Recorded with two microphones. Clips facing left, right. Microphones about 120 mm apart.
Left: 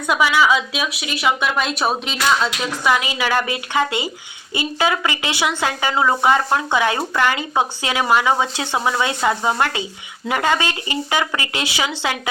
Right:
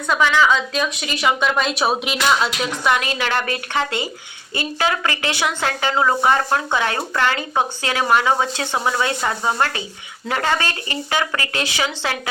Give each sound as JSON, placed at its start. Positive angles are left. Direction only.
{"t": 0.1, "sound": "a woman's voice", "side_deg": 10}